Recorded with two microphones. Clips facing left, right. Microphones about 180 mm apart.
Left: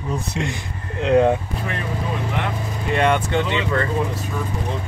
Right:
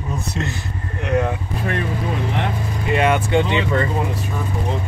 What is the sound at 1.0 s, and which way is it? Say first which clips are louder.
Speech: left 5 dB; 25° left (ahead or behind).